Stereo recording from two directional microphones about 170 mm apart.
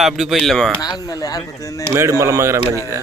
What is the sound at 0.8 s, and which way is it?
Speech, 25° left (ahead or behind).